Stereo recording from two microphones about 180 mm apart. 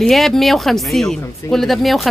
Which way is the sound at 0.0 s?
Centre (ahead or behind).